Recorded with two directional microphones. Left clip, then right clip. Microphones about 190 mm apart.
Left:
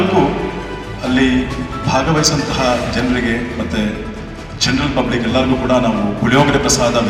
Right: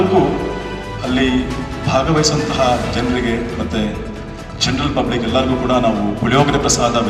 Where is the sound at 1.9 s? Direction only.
25° right (ahead or behind).